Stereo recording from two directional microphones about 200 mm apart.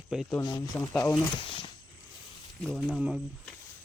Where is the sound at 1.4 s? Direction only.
25° left (ahead or behind).